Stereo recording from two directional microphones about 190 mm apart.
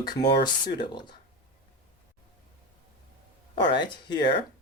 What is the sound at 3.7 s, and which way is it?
Speech, 25° left (ahead or behind).